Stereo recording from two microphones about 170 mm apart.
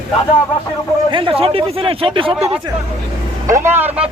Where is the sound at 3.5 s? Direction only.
15° right (ahead or behind).